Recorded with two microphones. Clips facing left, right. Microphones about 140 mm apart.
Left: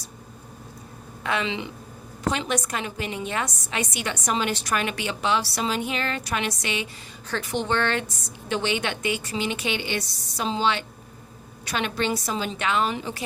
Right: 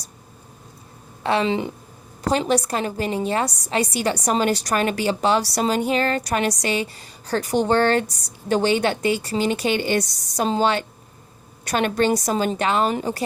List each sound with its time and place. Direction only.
1.2 s a woman's voice: 35° right (ahead or behind)